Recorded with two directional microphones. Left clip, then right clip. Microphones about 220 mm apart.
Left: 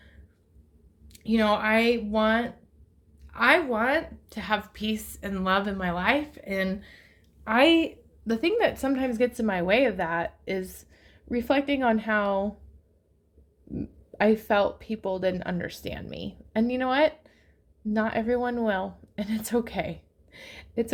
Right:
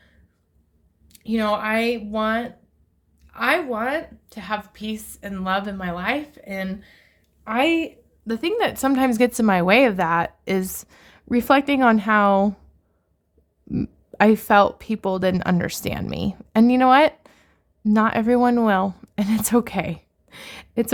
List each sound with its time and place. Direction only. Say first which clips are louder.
1.0 s a woman's voice: right 1 dB; 5° right (ahead or behind); by 12.5 s 45° right (ahead or behind)
13.7 s speech: right 8 dB; 50° right (ahead or behind)